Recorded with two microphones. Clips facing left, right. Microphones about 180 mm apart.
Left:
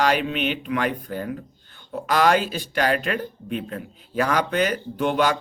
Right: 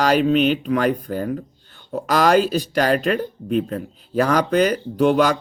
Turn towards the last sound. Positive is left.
turn(degrees=-40)  # may be behind; listen again after turning